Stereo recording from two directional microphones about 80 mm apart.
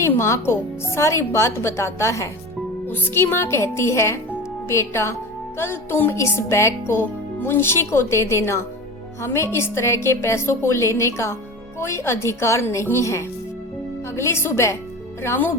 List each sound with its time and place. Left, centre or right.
0.0 s a woman's voice: left
2.8 s a woman's voice: left
5.5 s music: left
6.1 s a woman's voice: left
15.2 s music: left